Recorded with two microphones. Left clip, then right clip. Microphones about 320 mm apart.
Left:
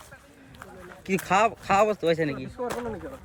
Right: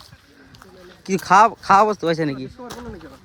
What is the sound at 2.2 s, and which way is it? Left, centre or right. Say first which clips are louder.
Speech: right 4 dB; right.